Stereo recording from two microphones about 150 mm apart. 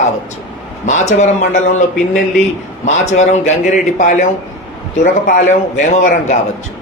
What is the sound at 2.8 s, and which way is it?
Speech, 50° left (ahead or behind).